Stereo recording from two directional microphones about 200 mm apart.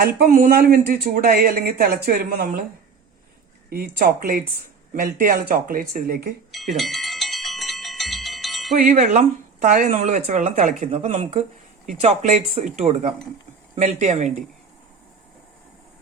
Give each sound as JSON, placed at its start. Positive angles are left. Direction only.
{"t": 0.0, "sound": "speech", "side_deg": -50}
{"t": 3.7, "sound": "speech", "side_deg": -50}
{"t": 6.5, "sound": "bicycle bell", "side_deg": 0}
{"t": 8.7, "sound": "speech", "side_deg": -35}